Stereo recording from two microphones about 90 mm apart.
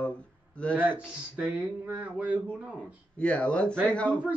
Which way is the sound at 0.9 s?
15° right (ahead or behind).